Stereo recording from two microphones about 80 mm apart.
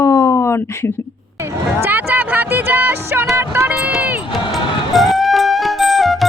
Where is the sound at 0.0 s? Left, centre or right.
Left.